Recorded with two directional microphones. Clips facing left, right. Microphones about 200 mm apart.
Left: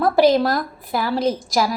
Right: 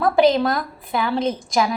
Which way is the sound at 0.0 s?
Centre (ahead or behind).